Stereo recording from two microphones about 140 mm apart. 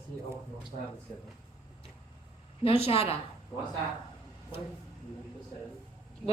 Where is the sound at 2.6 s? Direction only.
45° left (ahead or behind).